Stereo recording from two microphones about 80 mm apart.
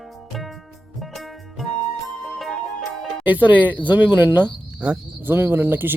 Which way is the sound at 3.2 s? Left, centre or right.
Right.